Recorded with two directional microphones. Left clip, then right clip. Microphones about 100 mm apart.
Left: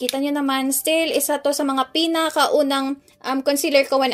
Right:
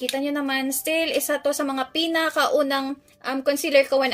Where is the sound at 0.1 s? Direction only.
35° left (ahead or behind).